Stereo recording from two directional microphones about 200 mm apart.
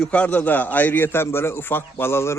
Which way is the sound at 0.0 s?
5° left (ahead or behind).